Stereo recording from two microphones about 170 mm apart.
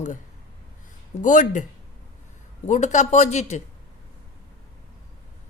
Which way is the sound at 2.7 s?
45° left (ahead or behind).